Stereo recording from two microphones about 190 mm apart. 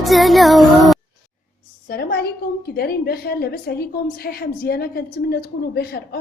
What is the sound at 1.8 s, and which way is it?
A woman's voice, 55° left (ahead or behind).